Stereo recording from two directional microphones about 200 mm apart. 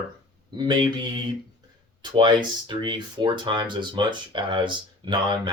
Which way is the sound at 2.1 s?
25° right (ahead or behind).